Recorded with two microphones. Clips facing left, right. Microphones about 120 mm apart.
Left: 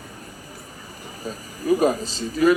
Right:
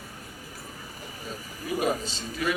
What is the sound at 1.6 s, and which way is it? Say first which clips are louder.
Speech: left 8 dB; 40° left (ahead or behind).